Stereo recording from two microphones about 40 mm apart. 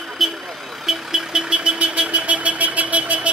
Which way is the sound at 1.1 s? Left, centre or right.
Centre.